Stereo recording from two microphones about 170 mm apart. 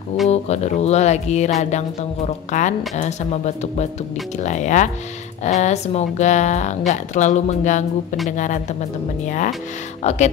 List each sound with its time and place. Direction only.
0.3 s speech: 40° left (ahead or behind)
10.0 s speech: 40° left (ahead or behind)